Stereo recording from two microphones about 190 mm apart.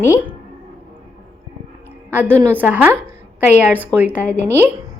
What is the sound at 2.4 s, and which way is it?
A woman's voice, 10° right (ahead or behind).